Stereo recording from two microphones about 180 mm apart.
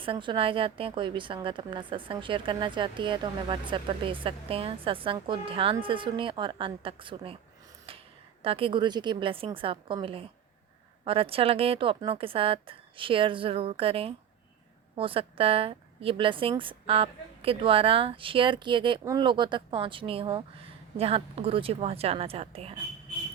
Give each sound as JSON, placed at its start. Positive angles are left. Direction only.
{"t": 0.0, "sound": "a woman's voice", "side_deg": -30}
{"t": 8.4, "sound": "a woman's voice", "side_deg": -30}